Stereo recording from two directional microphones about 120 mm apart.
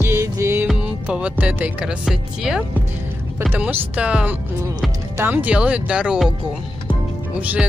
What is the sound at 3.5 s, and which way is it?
Speech, 15° right (ahead or behind).